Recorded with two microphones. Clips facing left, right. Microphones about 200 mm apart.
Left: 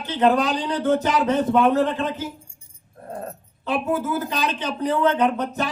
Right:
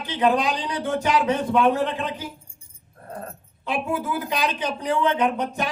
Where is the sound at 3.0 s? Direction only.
20° left (ahead or behind).